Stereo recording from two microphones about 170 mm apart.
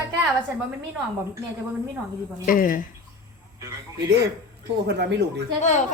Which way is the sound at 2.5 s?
55° left (ahead or behind).